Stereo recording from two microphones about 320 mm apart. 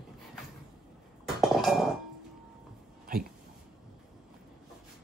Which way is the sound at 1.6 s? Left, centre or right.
Centre.